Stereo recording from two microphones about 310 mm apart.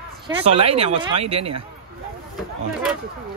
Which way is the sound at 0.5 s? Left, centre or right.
Centre.